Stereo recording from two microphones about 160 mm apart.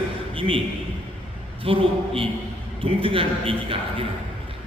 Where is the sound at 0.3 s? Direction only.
35° right (ahead or behind).